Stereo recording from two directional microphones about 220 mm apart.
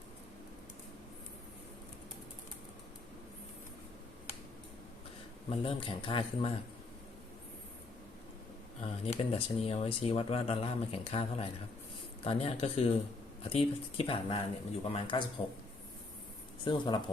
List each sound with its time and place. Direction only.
5.5 s speech: 25° left (ahead or behind)
8.8 s speech: 25° left (ahead or behind)
16.6 s speech: 20° left (ahead or behind)